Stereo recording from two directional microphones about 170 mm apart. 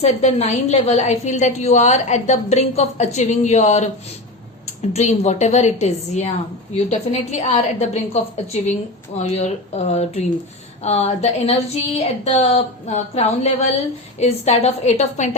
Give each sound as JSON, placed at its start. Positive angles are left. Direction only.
{"t": 0.0, "sound": "a woman's voice", "side_deg": 40}